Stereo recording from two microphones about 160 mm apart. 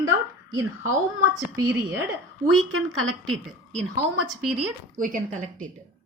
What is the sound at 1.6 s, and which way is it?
Speech, 15° right (ahead or behind).